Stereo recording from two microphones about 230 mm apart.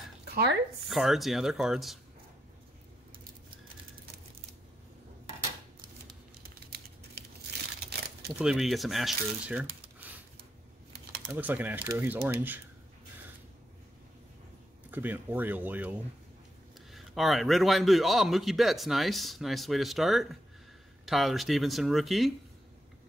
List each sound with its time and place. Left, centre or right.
0.3 s speech: right
0.8 s a man's voice: centre
6.4 s typing: right
8.4 s speech: centre
11.3 s speech: centre
14.9 s a man's voice: centre